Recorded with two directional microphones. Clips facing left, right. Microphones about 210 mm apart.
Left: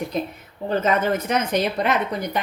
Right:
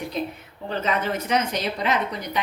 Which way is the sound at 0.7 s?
50° left (ahead or behind).